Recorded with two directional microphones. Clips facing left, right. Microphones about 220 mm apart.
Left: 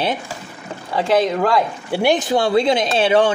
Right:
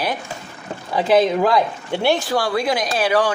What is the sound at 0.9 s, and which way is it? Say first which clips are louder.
Speech: right 1 dB; 5° right (ahead or behind).